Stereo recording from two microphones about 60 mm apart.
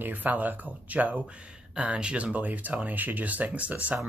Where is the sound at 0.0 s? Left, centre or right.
Right.